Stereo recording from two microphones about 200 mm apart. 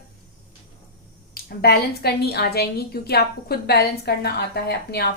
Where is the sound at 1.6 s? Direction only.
50° left (ahead or behind).